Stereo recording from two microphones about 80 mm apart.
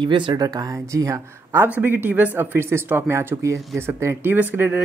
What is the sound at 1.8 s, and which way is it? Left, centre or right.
Speech, right.